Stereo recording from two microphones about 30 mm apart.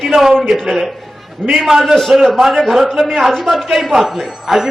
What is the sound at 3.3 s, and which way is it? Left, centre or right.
Speech, centre.